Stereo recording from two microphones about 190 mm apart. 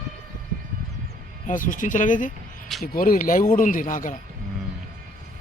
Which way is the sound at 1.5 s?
45° left (ahead or behind).